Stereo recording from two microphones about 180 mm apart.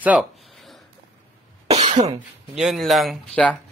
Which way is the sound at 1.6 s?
40° right (ahead or behind).